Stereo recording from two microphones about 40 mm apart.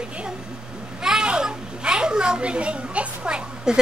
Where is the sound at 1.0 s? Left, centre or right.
Centre.